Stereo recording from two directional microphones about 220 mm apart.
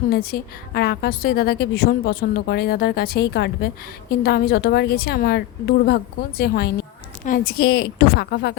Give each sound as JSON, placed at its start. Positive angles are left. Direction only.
{"t": 0.1, "sound": "a woman's voice", "side_deg": 45}